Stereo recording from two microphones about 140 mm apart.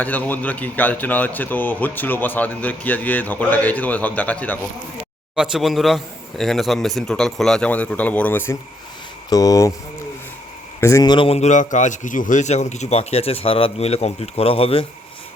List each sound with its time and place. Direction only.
0.0 s speech: 10° left (ahead or behind)
5.3 s a man's voice: 5° right (ahead or behind); by 9.7 s 25° left (ahead or behind)
10.8 s speech: 20° left (ahead or behind)
11.3 s a man's voice: 60° left (ahead or behind); by 14.8 s 40° left (ahead or behind)